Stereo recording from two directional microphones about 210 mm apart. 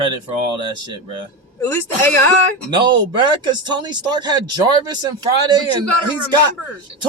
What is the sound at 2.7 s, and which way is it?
Speech, 20° right (ahead or behind).